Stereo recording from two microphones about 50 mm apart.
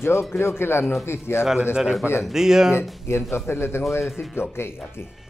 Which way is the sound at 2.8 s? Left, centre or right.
Left.